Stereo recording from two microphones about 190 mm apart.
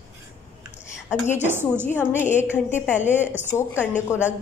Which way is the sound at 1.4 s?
10° right (ahead or behind).